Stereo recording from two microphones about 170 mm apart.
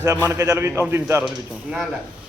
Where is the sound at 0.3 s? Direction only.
20° right (ahead or behind).